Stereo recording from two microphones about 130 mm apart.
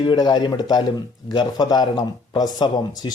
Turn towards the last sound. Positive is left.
turn(degrees=30)  # may be behind; listen again after turning